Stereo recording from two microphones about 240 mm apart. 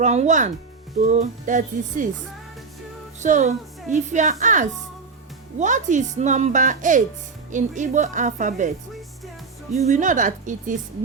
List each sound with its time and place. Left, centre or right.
0.0 s speech: right
3.2 s speech: right
9.7 s speech: right